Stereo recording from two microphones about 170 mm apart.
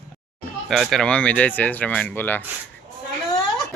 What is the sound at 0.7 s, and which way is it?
Speech, centre (ahead or behind).